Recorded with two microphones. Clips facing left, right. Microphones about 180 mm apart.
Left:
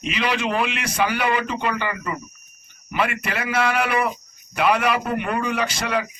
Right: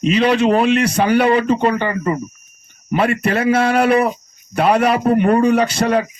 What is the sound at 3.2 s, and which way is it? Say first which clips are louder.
Speech: right 10 dB; 45° right (ahead or behind).